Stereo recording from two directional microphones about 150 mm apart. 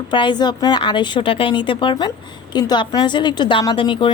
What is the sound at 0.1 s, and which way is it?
A woman's voice, 30° left (ahead or behind).